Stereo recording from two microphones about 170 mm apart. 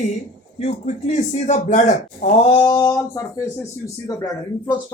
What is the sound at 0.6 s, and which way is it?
Speech, 40° left (ahead or behind).